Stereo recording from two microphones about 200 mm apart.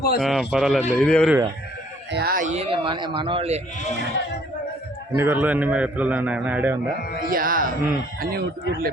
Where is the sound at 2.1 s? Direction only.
45° right (ahead or behind); by 3.6 s 30° right (ahead or behind).